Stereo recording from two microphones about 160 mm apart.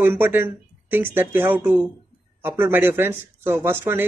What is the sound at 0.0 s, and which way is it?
Speech, 15° right (ahead or behind).